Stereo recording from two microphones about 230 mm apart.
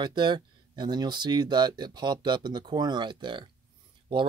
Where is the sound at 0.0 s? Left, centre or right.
Centre.